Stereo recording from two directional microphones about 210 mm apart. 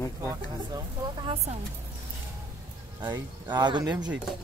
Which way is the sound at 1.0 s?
25° right (ahead or behind).